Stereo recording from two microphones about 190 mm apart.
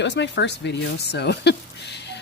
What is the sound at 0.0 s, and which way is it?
Speech, 70° left (ahead or behind).